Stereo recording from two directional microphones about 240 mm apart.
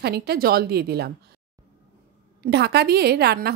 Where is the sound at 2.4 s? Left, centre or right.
Right.